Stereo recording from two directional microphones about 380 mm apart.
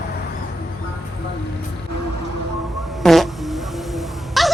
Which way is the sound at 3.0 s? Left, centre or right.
Centre.